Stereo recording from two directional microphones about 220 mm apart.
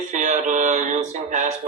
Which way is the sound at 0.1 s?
35° right (ahead or behind).